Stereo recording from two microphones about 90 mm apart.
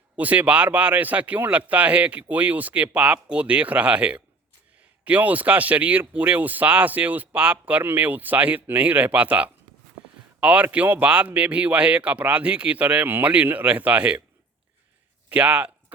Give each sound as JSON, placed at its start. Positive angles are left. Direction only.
{"t": 0.2, "sound": "speech", "side_deg": -15}
{"t": 15.3, "sound": "speech", "side_deg": -15}